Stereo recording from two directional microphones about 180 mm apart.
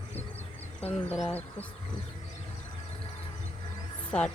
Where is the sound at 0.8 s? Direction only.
10° left (ahead or behind).